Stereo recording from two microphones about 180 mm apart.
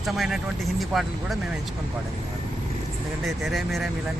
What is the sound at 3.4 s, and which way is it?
Speech, centre (ahead or behind).